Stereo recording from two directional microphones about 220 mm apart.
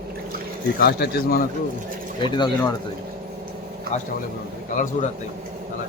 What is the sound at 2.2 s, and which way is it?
Speech, 20° left (ahead or behind).